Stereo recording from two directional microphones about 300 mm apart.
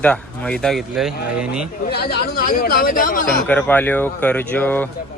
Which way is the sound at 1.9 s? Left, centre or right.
Left.